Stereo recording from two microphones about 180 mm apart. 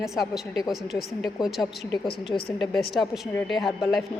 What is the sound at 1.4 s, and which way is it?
Speech, centre (ahead or behind).